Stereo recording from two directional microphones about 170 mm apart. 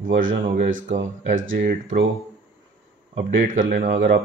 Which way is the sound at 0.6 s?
50° right (ahead or behind).